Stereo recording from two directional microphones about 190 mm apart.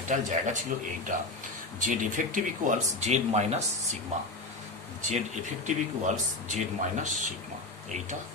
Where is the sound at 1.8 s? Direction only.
45° right (ahead or behind).